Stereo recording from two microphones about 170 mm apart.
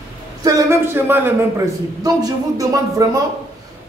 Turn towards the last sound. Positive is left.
turn(degrees=-20)  # may be behind; listen again after turning